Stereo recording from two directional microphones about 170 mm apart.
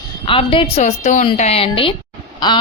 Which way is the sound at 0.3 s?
30° left (ahead or behind).